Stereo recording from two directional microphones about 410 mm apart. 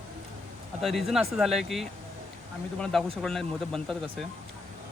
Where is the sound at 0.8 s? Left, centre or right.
Centre.